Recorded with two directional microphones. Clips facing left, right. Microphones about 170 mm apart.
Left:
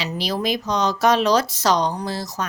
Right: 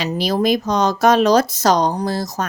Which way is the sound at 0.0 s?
50° right (ahead or behind).